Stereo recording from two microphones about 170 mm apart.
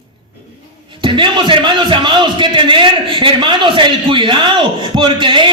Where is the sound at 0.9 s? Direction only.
30° right (ahead or behind).